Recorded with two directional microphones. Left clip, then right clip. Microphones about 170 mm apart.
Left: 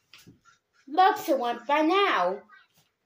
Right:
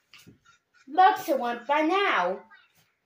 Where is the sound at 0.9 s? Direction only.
5° right (ahead or behind).